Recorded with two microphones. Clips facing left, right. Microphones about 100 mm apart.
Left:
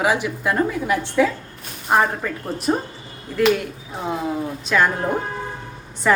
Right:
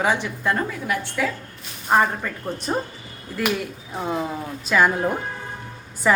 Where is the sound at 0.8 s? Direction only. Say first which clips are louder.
Left 6 dB; 20° left (ahead or behind).